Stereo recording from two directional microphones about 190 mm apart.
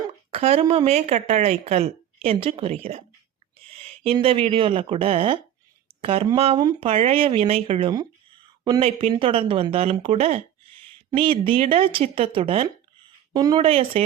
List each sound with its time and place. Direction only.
0.3 s a woman's voice: 35° right (ahead or behind)